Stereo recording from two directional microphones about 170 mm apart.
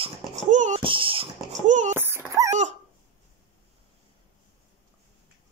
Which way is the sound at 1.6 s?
45° right (ahead or behind).